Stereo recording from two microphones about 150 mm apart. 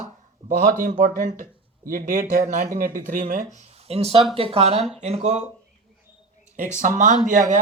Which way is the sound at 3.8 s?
40° right (ahead or behind).